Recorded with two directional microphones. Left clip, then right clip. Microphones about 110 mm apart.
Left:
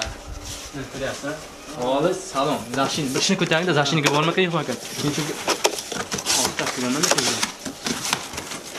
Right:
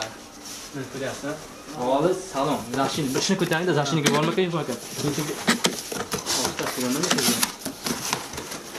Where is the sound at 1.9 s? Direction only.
5° left (ahead or behind).